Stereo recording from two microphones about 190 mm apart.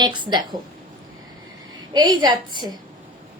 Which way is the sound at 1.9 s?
20° right (ahead or behind).